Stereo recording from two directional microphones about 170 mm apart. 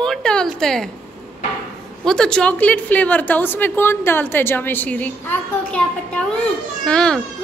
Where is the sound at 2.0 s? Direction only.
5° left (ahead or behind).